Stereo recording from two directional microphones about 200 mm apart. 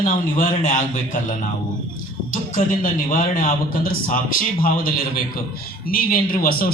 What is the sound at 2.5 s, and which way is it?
Speech, 40° left (ahead or behind).